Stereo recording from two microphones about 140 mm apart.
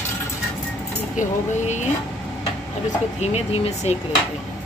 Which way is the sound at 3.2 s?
50° left (ahead or behind).